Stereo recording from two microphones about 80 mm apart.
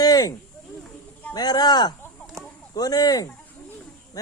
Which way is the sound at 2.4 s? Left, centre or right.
Right.